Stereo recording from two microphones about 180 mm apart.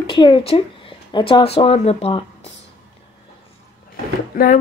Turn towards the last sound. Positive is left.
turn(degrees=50)  # may be behind; listen again after turning